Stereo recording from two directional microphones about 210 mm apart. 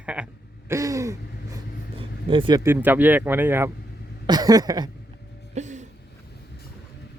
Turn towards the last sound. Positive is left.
turn(degrees=-35)  # may be behind; listen again after turning